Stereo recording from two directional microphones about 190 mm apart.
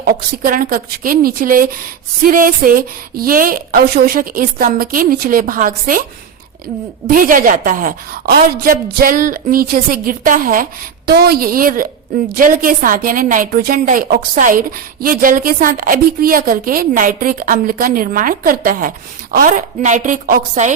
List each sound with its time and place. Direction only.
0.0 s a woman's voice: 50° right (ahead or behind)
7.1 s a woman's voice: 45° right (ahead or behind)